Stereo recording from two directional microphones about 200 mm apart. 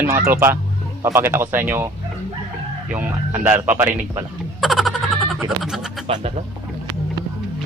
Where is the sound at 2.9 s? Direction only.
10° right (ahead or behind).